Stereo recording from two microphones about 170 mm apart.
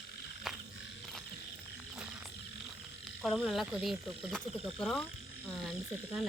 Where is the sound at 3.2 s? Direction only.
Centre (ahead or behind).